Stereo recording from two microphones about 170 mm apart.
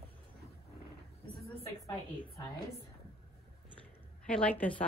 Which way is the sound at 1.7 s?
20° left (ahead or behind).